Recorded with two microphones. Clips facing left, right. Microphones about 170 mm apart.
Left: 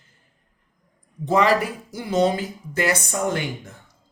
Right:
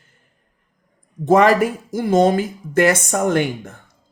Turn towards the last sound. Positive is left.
turn(degrees=-55)  # may be behind; listen again after turning